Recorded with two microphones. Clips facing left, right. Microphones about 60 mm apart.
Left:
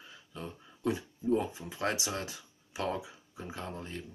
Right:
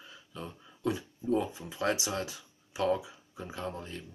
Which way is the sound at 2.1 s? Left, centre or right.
Left.